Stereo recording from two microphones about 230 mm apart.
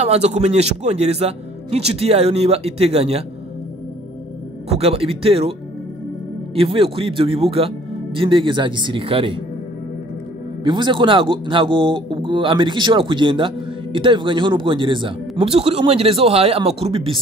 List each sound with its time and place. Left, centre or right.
0.0 s speech: right
4.7 s speech: right
6.5 s speech: right
10.6 s speech: right